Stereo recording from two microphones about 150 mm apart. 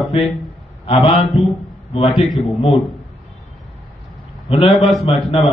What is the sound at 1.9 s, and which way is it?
Speech, 35° left (ahead or behind).